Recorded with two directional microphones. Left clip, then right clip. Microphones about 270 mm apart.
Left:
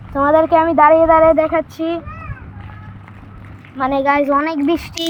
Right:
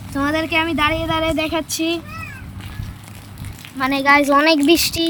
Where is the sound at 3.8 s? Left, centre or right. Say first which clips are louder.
Even; centre.